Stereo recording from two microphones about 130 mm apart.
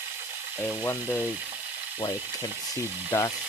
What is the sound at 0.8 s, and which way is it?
Speech, 15° left (ahead or behind).